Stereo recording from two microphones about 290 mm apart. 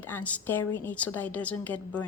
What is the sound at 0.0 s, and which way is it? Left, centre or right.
A woman's voice, centre.